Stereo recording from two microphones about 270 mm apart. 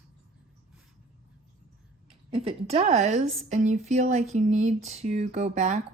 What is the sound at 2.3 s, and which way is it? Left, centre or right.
A woman's voice, right.